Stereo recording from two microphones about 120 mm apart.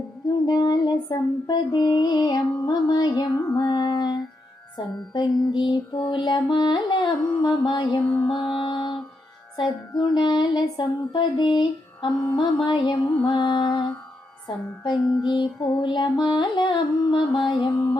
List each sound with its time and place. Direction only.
0.4 s female singing: 35° left (ahead or behind)
8.4 s music: 45° left (ahead or behind)
9.6 s female singing: 40° left (ahead or behind)